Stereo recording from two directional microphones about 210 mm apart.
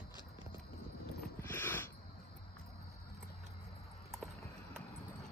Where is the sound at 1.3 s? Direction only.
10° left (ahead or behind).